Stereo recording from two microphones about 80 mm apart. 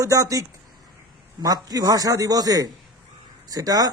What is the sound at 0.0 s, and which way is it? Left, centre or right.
Speech, right.